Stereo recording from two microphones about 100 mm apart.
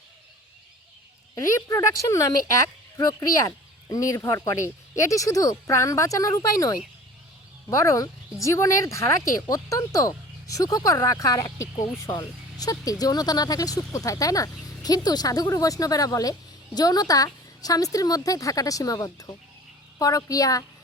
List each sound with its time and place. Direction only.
1.4 s a woman's voice: 30° left (ahead or behind)